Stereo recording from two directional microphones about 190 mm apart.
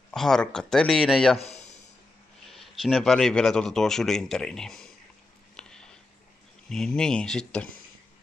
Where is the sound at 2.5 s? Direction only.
Centre (ahead or behind).